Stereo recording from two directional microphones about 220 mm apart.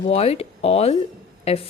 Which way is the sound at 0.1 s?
25° left (ahead or behind).